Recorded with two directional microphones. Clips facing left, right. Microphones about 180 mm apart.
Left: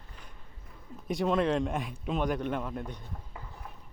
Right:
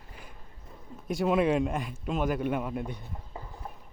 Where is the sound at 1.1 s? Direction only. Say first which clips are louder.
Right 2 dB; 5° right (ahead or behind).